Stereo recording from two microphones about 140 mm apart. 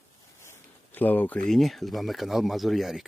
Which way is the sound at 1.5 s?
Centre (ahead or behind).